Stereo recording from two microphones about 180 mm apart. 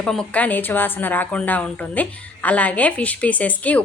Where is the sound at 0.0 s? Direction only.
5° left (ahead or behind).